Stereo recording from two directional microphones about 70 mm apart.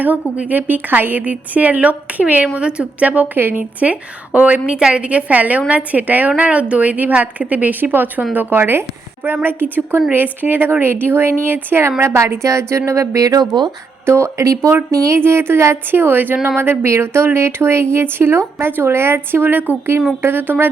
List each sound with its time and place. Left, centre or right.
0.0 s a woman's voice: right
14.0 s speech: right
15.2 s a woman's voice: right
16.6 s a woman's voice: right